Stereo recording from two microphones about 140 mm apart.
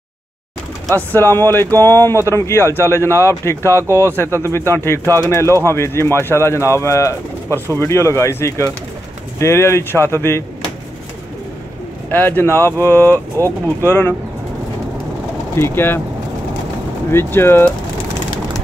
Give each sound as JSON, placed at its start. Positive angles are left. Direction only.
{"t": 0.9, "sound": "speech", "side_deg": 15}
{"t": 12.1, "sound": "speech", "side_deg": 15}
{"t": 15.5, "sound": "speech", "side_deg": 15}
{"t": 17.1, "sound": "speech", "side_deg": 15}